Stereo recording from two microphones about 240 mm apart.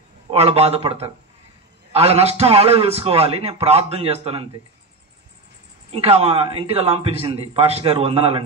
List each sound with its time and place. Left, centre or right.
0.3 s a man's voice: right
5.9 s a man's voice: right